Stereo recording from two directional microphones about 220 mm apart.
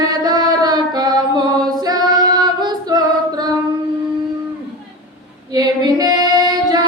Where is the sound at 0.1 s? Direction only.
20° right (ahead or behind).